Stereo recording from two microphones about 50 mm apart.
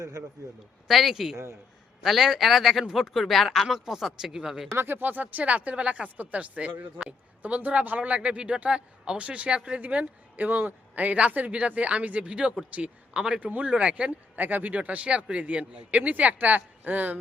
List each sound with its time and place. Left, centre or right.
0.9 s speech: centre
4.8 s speech: right; by 13.4 s centre
13.4 s speech: right
14.3 s speech: right